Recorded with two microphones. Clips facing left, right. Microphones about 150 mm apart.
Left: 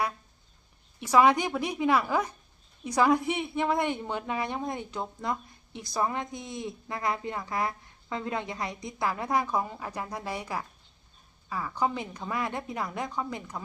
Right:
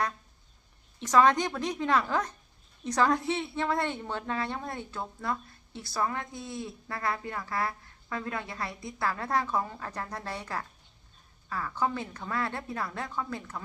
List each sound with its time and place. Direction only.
0.9 s a woman's voice: 10° left (ahead or behind)